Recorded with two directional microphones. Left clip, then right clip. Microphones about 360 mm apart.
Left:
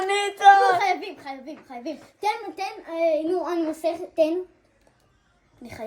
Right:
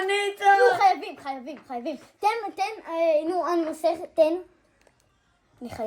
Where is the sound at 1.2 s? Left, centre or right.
Centre.